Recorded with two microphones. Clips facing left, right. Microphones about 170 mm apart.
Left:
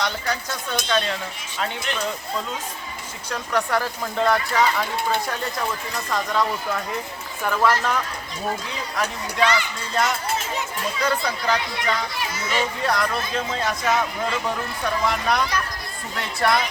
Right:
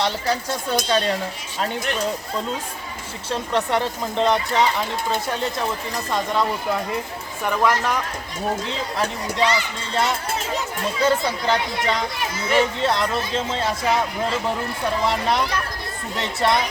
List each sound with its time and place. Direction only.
0.0 s speech: 30° right (ahead or behind)
3.2 s speech: 25° right (ahead or behind)
6.1 s speech: 20° right (ahead or behind)
8.6 s speech: 25° right (ahead or behind)